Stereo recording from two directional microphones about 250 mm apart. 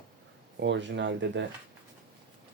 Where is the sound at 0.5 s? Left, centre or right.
Right.